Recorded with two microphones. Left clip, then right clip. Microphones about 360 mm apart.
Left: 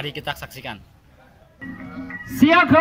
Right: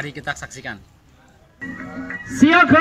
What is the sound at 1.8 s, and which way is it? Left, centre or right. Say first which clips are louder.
Speech: right 3 dB; centre.